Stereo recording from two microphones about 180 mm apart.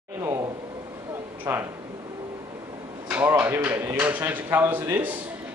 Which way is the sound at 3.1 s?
10° right (ahead or behind).